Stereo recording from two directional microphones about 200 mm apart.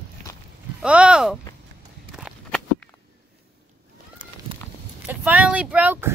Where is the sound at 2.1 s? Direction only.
5° right (ahead or behind).